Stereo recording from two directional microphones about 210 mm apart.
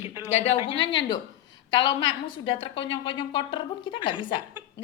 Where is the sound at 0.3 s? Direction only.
30° left (ahead or behind).